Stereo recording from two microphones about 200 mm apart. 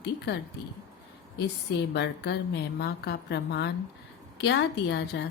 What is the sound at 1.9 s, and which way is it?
A woman's voice, 55° left (ahead or behind).